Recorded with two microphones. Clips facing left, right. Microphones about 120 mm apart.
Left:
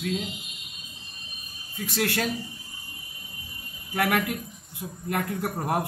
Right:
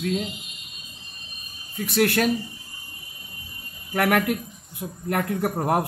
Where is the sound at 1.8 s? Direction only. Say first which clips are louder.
Right 6 dB; 60° right (ahead or behind).